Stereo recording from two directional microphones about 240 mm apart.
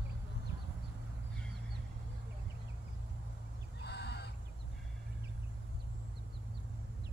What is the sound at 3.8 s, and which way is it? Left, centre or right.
Fowl, left.